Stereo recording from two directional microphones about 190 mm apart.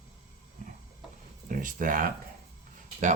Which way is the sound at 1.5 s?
45° right (ahead or behind).